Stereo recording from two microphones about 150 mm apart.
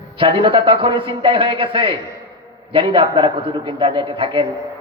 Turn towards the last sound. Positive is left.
turn(degrees=-35)  # may be behind; listen again after turning